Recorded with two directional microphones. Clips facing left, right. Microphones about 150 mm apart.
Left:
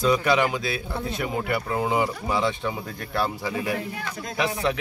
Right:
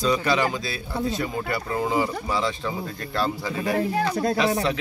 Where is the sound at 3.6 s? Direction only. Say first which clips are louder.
Right 6 dB; 35° right (ahead or behind).